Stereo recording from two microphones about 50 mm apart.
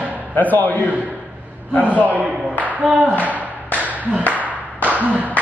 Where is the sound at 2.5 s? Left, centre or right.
Right.